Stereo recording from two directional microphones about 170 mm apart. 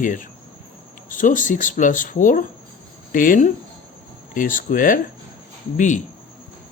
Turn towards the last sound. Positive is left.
turn(degrees=45)  # may be behind; listen again after turning